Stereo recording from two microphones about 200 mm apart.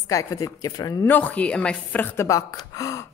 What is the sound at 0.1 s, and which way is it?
A woman's voice, 15° left (ahead or behind).